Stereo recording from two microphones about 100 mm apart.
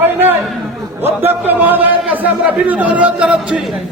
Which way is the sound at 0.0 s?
20° right (ahead or behind).